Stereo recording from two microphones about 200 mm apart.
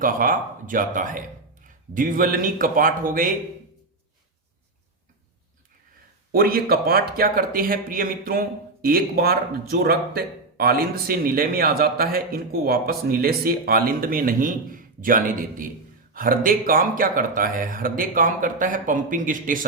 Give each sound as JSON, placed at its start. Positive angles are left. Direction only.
{"t": 0.0, "sound": "speech", "side_deg": -45}
{"t": 6.3, "sound": "speech", "side_deg": -50}